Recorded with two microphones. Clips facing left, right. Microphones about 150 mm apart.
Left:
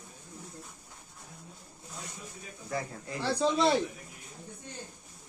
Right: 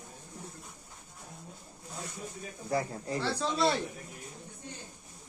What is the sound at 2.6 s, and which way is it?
Speech, 30° right (ahead or behind).